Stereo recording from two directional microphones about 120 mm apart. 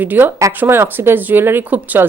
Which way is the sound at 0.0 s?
15° right (ahead or behind).